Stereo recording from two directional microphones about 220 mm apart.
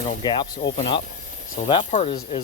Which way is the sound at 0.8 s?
25° left (ahead or behind).